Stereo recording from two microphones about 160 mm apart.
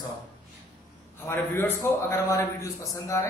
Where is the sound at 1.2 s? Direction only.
15° left (ahead or behind).